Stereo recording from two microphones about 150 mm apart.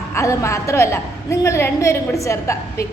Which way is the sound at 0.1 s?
20° left (ahead or behind).